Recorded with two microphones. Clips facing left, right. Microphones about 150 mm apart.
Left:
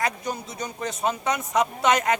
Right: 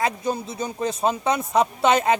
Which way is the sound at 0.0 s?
30° right (ahead or behind).